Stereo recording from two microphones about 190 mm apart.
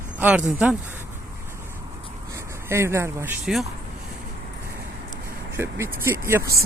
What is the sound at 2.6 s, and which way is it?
Speech, 15° right (ahead or behind).